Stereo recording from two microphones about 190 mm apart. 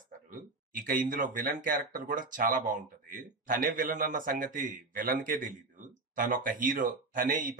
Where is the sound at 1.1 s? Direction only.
45° right (ahead or behind).